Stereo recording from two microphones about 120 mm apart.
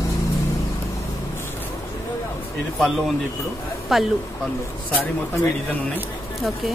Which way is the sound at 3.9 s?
Centre (ahead or behind).